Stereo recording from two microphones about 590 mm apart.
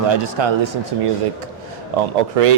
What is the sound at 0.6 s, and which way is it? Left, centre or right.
Speech, right.